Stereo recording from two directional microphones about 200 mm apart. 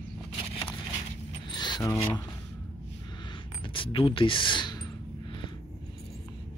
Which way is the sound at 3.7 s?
25° left (ahead or behind).